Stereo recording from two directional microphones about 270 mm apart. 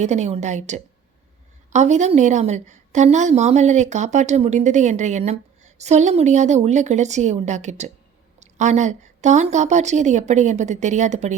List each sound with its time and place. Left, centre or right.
0.0 s a woman's voice: right